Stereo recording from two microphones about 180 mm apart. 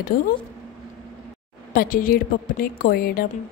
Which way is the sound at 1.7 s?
50° left (ahead or behind).